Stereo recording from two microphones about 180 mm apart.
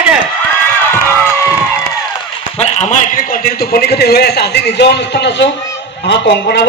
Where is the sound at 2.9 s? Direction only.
50° left (ahead or behind).